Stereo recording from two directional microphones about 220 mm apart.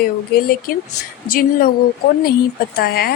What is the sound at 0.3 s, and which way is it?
Speech, 40° left (ahead or behind).